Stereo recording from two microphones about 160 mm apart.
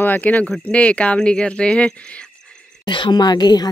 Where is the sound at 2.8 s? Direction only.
30° left (ahead or behind).